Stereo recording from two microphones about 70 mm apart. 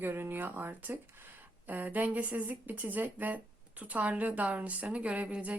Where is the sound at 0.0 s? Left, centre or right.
Right.